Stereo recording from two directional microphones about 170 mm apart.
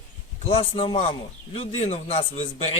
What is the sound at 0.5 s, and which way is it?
A man's voice, 30° left (ahead or behind).